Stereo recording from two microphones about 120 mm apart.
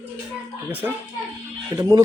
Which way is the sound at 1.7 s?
30° right (ahead or behind).